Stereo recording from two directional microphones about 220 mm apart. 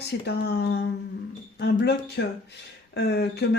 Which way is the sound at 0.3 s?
50° left (ahead or behind).